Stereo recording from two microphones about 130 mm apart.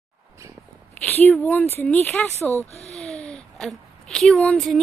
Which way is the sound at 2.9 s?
55° left (ahead or behind).